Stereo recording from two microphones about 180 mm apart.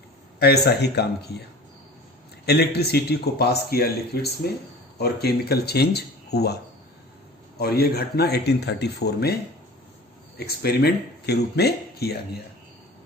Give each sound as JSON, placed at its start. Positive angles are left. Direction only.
{"t": 0.3, "sound": "speech", "side_deg": 65}
{"t": 2.5, "sound": "speech", "side_deg": 65}
{"t": 7.6, "sound": "speech", "side_deg": 60}
{"t": 10.3, "sound": "speech", "side_deg": 60}